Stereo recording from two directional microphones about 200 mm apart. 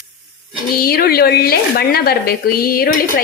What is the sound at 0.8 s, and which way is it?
Speech, 50° left (ahead or behind).